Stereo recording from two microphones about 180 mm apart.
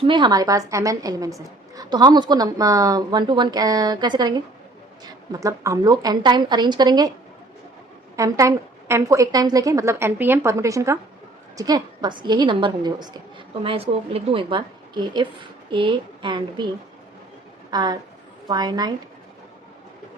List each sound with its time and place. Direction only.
0.0 s a woman's voice: 25° right (ahead or behind)
8.1 s a woman's voice: 15° right (ahead or behind)
17.7 s a woman's voice: 25° right (ahead or behind)